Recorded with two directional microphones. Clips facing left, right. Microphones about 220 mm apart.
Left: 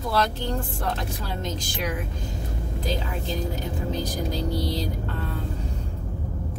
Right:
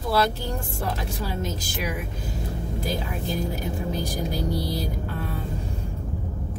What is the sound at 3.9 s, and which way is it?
Speech, 10° right (ahead or behind).